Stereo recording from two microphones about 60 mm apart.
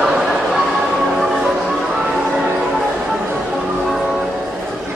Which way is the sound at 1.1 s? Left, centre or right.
Centre.